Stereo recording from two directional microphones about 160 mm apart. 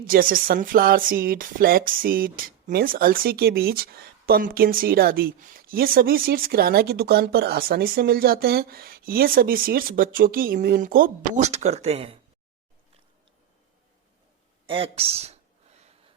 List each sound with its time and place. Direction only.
0.0 s speech: 65° right (ahead or behind)
11.4 s speech: 45° right (ahead or behind)
14.7 s a sound: 35° right (ahead or behind)